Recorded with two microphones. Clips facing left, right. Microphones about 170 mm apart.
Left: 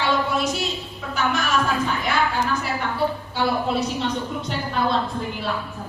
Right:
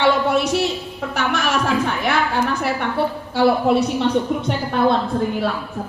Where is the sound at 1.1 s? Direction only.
70° right (ahead or behind).